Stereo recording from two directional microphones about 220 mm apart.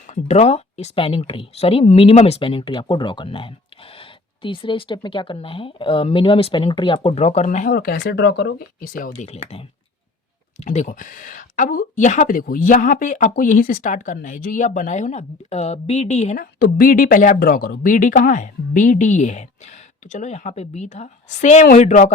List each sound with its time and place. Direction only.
0.1 s speech: 30° left (ahead or behind)